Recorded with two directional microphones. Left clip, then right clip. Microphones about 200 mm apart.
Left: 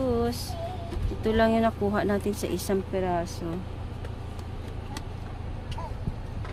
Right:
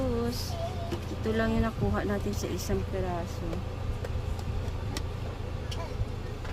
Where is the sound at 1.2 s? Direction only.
40° left (ahead or behind).